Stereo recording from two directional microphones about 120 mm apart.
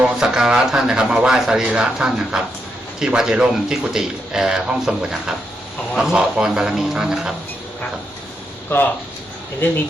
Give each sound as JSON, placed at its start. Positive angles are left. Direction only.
{"t": 0.0, "sound": "speech", "side_deg": -5}
{"t": 8.7, "sound": "speech", "side_deg": 15}